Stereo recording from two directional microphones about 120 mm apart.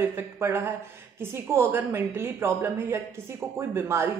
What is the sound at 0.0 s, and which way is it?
A woman's voice, 20° right (ahead or behind).